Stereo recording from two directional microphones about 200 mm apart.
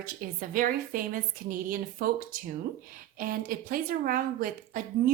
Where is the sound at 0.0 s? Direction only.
45° right (ahead or behind).